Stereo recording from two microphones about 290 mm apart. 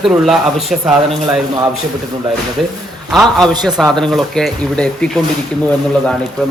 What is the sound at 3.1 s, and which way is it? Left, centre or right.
Speech, centre.